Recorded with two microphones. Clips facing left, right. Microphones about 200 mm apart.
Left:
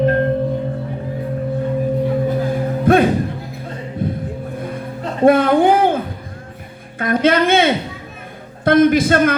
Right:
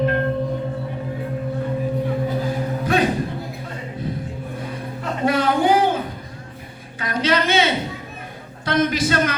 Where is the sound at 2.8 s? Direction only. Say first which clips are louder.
Left 7 dB; 55° left (ahead or behind).